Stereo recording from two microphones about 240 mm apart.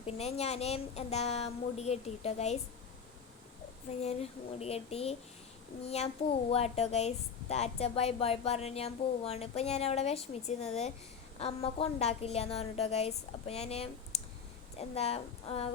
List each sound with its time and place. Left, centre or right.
0.0 s a woman's voice: left
4.0 s a woman's voice: left